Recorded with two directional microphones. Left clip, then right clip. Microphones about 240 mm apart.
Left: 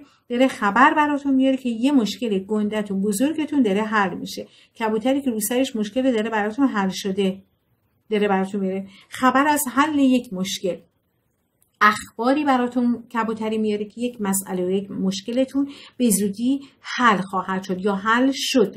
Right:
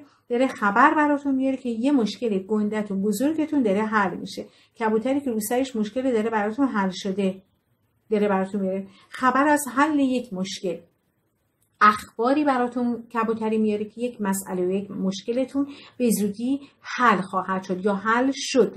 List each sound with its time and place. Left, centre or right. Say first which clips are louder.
0.3 s a woman's voice: left 2 dB; left
11.8 s a woman's voice: even; left